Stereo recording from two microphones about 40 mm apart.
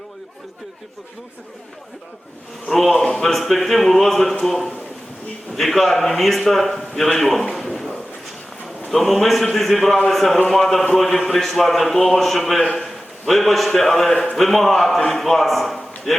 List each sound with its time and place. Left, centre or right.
2.6 s a man's voice: centre
7.5 s a sound: centre
8.9 s a man's voice: centre